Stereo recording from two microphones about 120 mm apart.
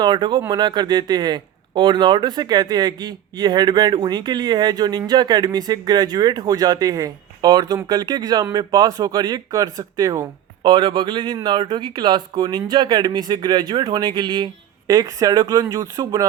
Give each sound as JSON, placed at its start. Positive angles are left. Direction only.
{"t": 0.0, "sound": "speech", "side_deg": -40}